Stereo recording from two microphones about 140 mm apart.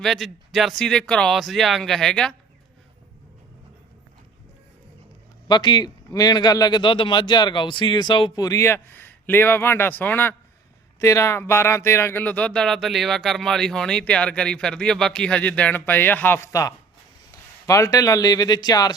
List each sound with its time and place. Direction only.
0.0 s speech: centre (ahead or behind)
5.5 s a man's voice: 30° left (ahead or behind)